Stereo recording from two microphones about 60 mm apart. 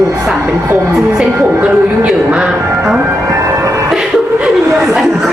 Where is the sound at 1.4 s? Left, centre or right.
Right.